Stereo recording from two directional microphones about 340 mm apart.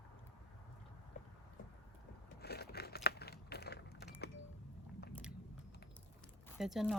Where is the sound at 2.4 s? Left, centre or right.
Left.